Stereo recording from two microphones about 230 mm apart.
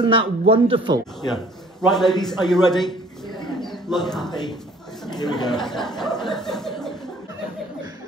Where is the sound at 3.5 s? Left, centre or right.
Centre.